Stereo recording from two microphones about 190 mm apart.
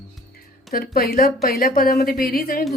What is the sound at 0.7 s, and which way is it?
A woman's voice, 50° left (ahead or behind).